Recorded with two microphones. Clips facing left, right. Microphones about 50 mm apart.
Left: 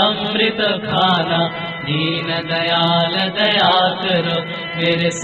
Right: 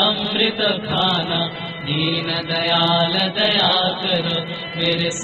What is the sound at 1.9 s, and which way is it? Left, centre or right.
Mantra, left.